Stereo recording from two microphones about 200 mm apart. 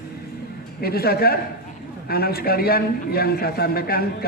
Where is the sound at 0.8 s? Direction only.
50° left (ahead or behind).